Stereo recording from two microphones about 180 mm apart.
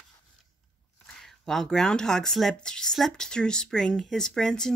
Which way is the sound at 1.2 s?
Centre (ahead or behind).